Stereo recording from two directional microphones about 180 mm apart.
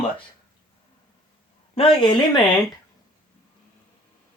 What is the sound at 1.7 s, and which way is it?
Speech, 30° left (ahead or behind).